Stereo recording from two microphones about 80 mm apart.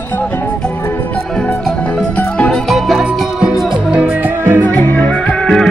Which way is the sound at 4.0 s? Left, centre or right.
Right.